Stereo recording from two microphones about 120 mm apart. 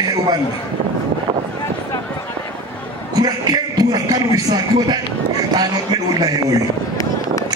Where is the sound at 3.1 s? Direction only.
30° right (ahead or behind).